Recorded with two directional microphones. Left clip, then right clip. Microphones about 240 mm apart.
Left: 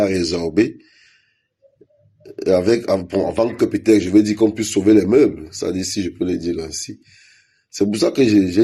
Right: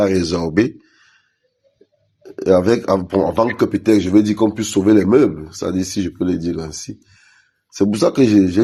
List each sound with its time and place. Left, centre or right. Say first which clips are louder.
0.0 s speech: right 2 dB; right
2.2 s speech: right 2 dB; right